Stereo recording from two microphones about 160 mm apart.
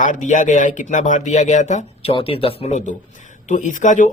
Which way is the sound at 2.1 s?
35° left (ahead or behind).